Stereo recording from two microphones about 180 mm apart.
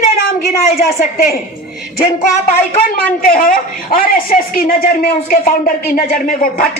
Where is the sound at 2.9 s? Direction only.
50° left (ahead or behind).